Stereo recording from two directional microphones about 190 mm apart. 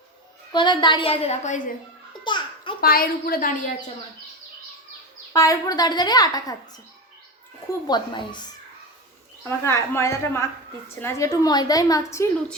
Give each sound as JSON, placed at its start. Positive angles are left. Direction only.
{"t": 0.5, "sound": "a woman's voice", "side_deg": 25}
{"t": 2.2, "sound": "babbling", "side_deg": 25}
{"t": 2.8, "sound": "a woman's voice", "side_deg": 50}
{"t": 5.3, "sound": "a woman's voice", "side_deg": 20}
{"t": 7.9, "sound": "a woman's voice", "side_deg": 25}
{"t": 9.4, "sound": "a woman's voice", "side_deg": 15}